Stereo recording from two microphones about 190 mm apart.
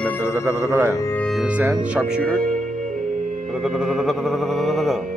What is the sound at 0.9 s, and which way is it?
Speech, 15° left (ahead or behind).